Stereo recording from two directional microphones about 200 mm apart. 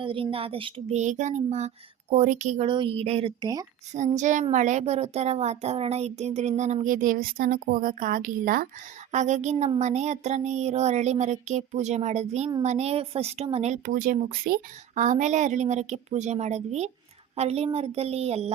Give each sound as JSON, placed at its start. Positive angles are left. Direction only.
{"t": 0.0, "sound": "a woman's voice", "side_deg": -25}
{"t": 2.6, "sound": "speech", "side_deg": -25}
{"t": 3.9, "sound": "a woman's voice", "side_deg": -35}